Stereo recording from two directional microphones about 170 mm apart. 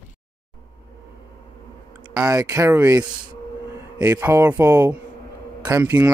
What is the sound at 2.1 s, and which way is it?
Speech, 20° right (ahead or behind).